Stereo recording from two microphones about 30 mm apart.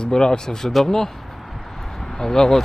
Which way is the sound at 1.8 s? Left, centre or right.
Centre.